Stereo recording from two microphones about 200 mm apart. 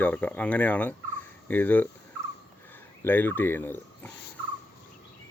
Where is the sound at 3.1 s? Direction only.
10° left (ahead or behind).